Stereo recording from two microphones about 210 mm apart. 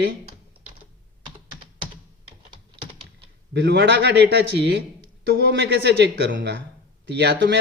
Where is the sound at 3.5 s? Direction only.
55° right (ahead or behind).